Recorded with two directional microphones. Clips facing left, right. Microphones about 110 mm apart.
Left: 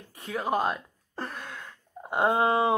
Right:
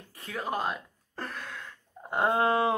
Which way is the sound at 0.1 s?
20° left (ahead or behind).